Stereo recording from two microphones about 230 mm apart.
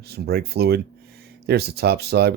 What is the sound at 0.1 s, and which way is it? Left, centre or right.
Speech, right.